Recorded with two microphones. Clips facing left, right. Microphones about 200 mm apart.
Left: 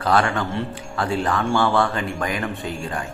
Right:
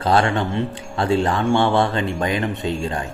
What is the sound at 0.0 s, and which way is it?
Speech, 25° right (ahead or behind).